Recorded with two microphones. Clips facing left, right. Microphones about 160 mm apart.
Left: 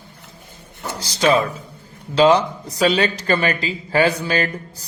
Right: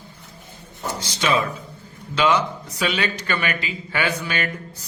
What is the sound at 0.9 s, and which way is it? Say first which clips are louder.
A man's voice: left 5 dB; 35° left (ahead or behind).